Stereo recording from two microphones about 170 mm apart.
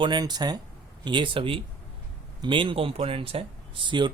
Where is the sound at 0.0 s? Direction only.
25° right (ahead or behind).